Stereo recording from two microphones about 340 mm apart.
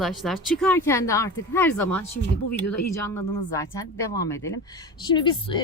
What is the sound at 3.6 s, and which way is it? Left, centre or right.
Speech, centre.